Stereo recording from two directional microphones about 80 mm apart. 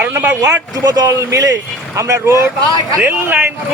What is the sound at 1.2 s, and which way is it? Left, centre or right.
Speech, right.